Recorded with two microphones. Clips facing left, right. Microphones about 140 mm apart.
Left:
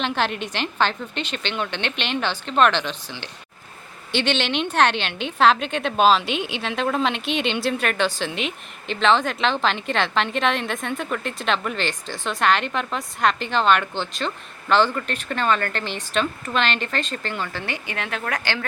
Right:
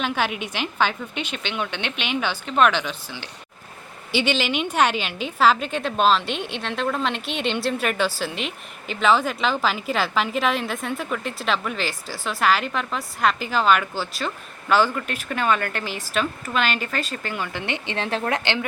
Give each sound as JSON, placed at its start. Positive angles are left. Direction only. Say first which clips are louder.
{"t": 0.0, "sound": "a woman's voice", "louder": "left 1 dB", "side_deg": -5}